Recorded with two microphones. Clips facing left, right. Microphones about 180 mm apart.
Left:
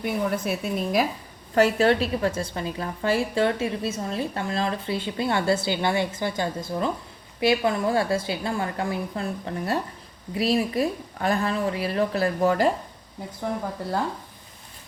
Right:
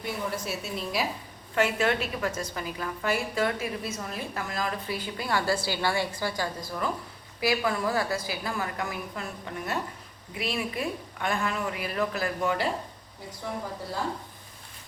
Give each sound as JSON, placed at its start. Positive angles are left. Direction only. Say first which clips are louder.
{"t": 0.0, "sound": "a woman's voice", "louder": "left 7 dB", "side_deg": 55}
{"t": 1.5, "sound": "a woman's voice", "louder": "left 6 dB", "side_deg": 35}